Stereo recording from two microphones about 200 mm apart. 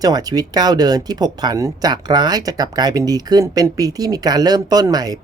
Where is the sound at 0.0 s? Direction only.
20° right (ahead or behind).